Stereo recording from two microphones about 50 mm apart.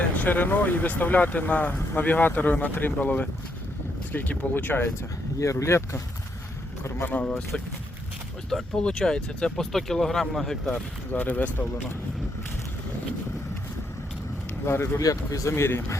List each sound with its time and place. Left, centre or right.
0.2 s speech: left
5.4 s speech: left
7.0 s speech: left
7.3 s speech: left
8.7 s speech: centre
11.1 s speech: left
14.6 s speech: left
14.9 s speech: left